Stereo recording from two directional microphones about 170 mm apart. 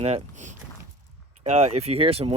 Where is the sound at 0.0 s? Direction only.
40° right (ahead or behind).